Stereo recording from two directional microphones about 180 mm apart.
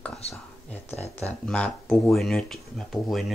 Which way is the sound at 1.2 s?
10° left (ahead or behind).